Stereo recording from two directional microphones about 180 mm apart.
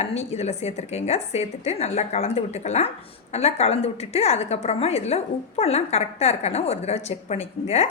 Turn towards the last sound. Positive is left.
turn(degrees=35)  # may be behind; listen again after turning